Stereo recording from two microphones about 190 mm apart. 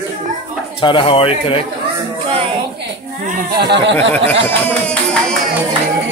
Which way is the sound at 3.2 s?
50° right (ahead or behind).